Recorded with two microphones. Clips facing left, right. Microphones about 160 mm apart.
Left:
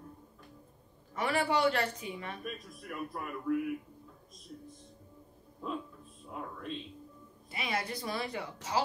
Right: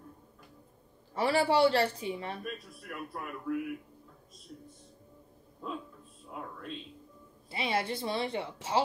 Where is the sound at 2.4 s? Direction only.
Centre (ahead or behind).